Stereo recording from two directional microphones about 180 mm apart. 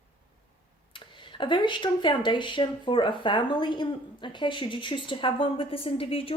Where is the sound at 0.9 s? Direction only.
25° left (ahead or behind).